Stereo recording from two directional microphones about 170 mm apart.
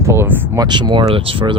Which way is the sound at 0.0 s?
15° right (ahead or behind).